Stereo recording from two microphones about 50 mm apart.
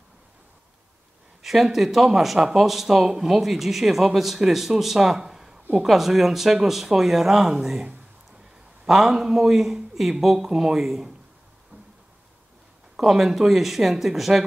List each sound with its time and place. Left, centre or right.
1.4 s speech: centre
8.8 s speech: centre
12.9 s speech: centre